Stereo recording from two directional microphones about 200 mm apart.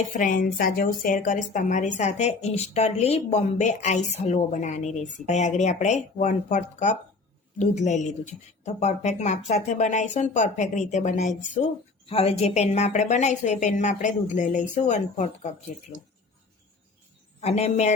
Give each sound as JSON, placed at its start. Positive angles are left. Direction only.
{"t": 0.1, "sound": "speech", "side_deg": 40}
{"t": 17.4, "sound": "speech", "side_deg": 30}